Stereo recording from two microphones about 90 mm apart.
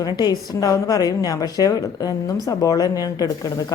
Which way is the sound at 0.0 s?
50° left (ahead or behind).